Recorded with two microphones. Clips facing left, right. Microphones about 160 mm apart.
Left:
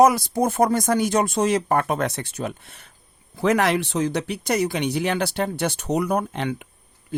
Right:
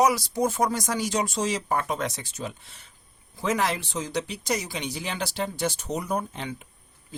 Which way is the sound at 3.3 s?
65° left (ahead or behind).